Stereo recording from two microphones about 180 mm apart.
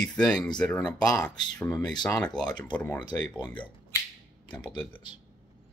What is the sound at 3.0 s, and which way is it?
Speech, 25° left (ahead or behind).